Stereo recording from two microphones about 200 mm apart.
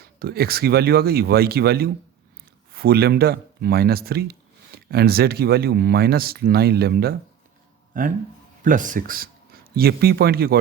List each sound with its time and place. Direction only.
0.0 s speech: 50° right (ahead or behind)